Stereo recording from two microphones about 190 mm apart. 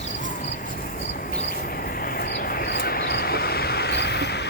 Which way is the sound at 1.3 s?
50° left (ahead or behind).